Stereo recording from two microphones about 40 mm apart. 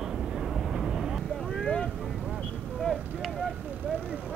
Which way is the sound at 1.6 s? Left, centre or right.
Centre.